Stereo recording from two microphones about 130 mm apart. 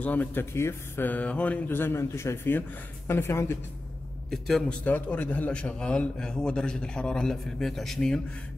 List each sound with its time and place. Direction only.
0.0 s a man's voice: 10° left (ahead or behind)
4.3 s a man's voice: 5° left (ahead or behind)